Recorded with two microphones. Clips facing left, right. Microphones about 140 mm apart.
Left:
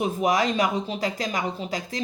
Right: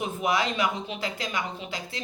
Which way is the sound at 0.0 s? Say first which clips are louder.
Left 4 dB; 40° left (ahead or behind).